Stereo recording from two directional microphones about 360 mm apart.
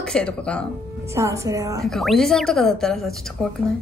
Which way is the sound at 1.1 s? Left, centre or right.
Centre.